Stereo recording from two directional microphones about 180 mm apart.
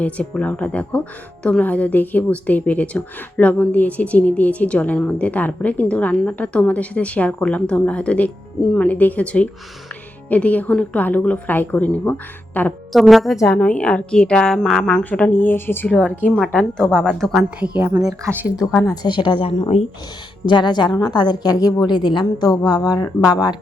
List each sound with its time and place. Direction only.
0.0 s a woman's voice: 10° left (ahead or behind); by 18.4 s 10° right (ahead or behind)
18.8 s a woman's voice: 20° left (ahead or behind)